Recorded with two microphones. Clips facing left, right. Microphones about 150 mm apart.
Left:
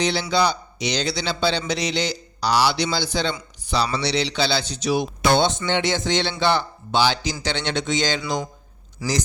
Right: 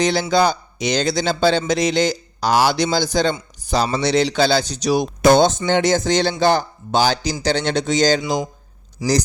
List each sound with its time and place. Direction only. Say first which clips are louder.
0.0 s a man's voice: right 4 dB; 45° right (ahead or behind)
9.0 s speech: right 7 dB; 15° right (ahead or behind)